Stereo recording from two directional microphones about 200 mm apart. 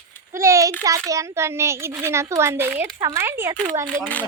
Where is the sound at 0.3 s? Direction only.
15° right (ahead or behind).